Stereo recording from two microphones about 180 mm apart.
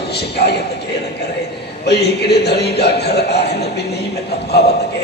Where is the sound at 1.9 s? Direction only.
65° left (ahead or behind).